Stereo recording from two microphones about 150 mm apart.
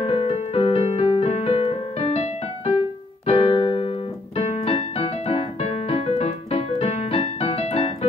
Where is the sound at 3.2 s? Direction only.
40° left (ahead or behind).